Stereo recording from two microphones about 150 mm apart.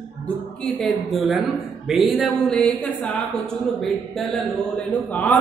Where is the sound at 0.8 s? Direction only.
Centre (ahead or behind).